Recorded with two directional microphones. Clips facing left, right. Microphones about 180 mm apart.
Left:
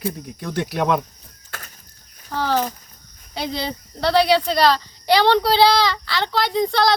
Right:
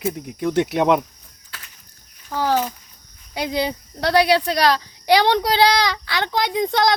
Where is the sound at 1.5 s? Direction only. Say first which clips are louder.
Left 5 dB; 45° left (ahead or behind).